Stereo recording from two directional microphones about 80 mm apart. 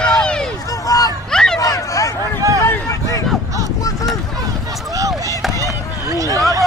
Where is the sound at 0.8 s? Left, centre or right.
Left.